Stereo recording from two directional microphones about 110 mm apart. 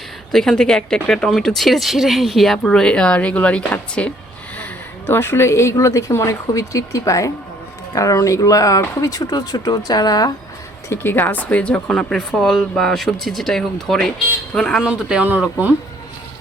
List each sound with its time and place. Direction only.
0.3 s speech: 5° left (ahead or behind)
5.0 s a woman's voice: 20° left (ahead or behind)
10.8 s speech: 20° left (ahead or behind); by 14.8 s 5° left (ahead or behind)
14.8 s speech: 10° right (ahead or behind)